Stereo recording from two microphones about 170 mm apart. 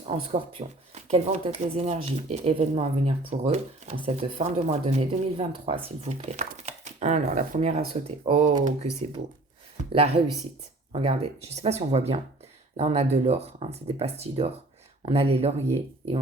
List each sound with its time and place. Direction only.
0.1 s speech: 35° right (ahead or behind)
9.9 s speech: 35° right (ahead or behind)